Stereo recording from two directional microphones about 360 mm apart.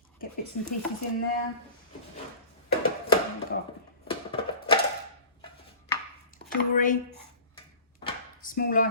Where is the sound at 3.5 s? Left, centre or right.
Left.